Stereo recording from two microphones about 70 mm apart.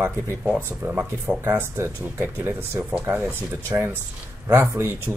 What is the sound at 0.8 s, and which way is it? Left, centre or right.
Speech, right.